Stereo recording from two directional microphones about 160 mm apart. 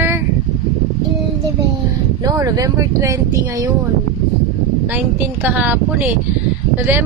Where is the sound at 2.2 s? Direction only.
20° right (ahead or behind).